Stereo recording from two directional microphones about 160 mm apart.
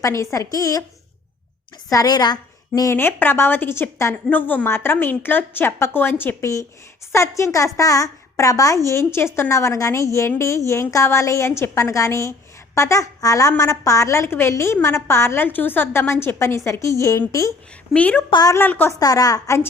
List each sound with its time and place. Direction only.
0.0 s speech: 20° left (ahead or behind)
1.9 s a woman's voice: 25° left (ahead or behind)
18.3 s speech: 25° left (ahead or behind)
18.6 s a woman's voice: 10° left (ahead or behind)